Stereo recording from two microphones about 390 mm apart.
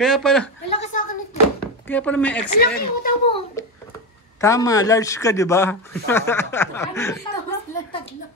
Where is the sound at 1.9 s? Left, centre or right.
Centre.